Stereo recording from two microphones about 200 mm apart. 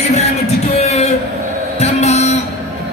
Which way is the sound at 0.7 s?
35° left (ahead or behind).